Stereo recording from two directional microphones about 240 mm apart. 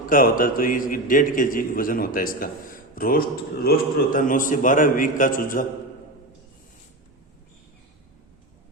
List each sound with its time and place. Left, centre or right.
0.1 s a man's voice: left